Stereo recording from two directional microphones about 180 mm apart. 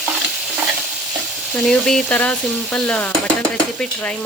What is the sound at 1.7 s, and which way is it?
Stir, 5° left (ahead or behind).